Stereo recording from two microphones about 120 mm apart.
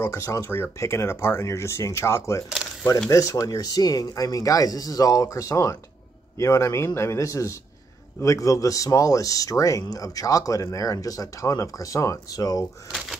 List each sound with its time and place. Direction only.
0.0 s speech: 25° left (ahead or behind)